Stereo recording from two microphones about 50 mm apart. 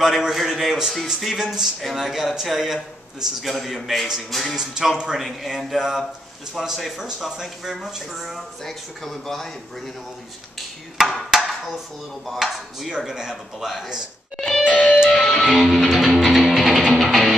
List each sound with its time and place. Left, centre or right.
0.0 s a man's voice: centre
4.6 s speech: centre
5.1 s a man's voice: centre
11.0 s a man's voice: centre
14.7 s music: centre
15.0 s music: centre